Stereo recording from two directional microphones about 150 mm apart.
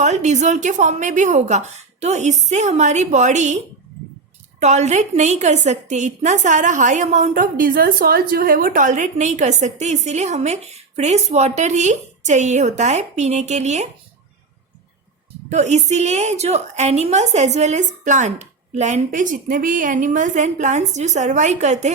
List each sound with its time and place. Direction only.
0.0 s a woman's voice: 50° right (ahead or behind)
4.6 s a woman's voice: 50° right (ahead or behind)
15.4 s a woman's voice: 50° right (ahead or behind)